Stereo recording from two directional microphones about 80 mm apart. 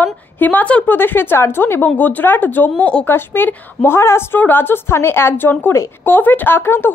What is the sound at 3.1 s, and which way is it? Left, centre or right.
A woman's voice, left.